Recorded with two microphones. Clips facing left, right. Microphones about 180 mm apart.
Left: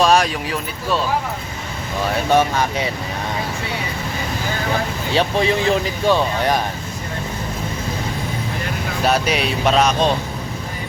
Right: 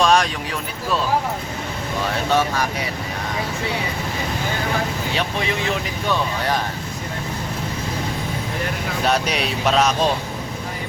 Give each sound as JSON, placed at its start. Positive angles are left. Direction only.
{"t": 0.0, "sound": "a sound", "side_deg": 5}
{"t": 2.3, "sound": "speech", "side_deg": 25}
{"t": 5.1, "sound": "speech", "side_deg": 30}
{"t": 9.0, "sound": "speech", "side_deg": 5}